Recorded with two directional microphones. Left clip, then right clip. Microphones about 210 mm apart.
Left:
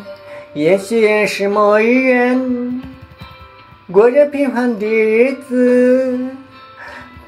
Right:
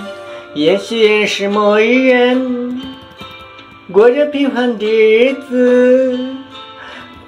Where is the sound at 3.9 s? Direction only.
10° left (ahead or behind).